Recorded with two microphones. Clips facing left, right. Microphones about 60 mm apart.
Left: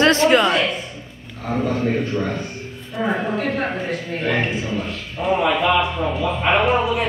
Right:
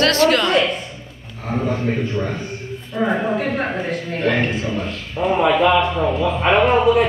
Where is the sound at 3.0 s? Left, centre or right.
Centre.